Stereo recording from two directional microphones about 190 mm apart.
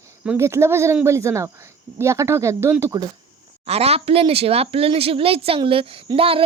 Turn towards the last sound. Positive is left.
turn(degrees=-30)  # may be behind; listen again after turning